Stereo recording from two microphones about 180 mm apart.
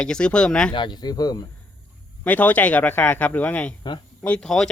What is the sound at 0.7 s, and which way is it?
Speech, 25° left (ahead or behind).